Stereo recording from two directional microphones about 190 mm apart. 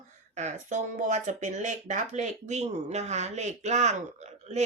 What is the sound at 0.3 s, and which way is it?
Speech, 40° right (ahead or behind).